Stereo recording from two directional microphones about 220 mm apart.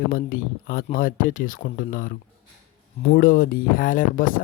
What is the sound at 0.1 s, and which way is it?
Speech, 40° left (ahead or behind).